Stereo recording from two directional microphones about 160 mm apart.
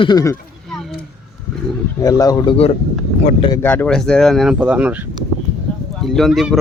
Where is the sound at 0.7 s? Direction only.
Centre (ahead or behind).